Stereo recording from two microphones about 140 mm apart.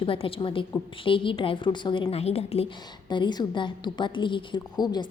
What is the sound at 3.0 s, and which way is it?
A woman's voice, 35° left (ahead or behind).